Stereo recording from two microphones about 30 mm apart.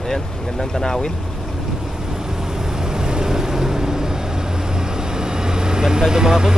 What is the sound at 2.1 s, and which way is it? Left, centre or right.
Vehicle, centre.